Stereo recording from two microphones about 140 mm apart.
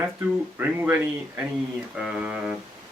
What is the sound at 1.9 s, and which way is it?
Mantra, 5° right (ahead or behind).